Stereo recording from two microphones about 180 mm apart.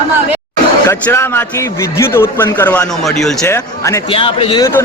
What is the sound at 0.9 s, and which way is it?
Speech, 15° left (ahead or behind).